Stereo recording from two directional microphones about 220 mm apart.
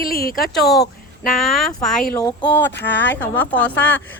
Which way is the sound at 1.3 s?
Centre (ahead or behind).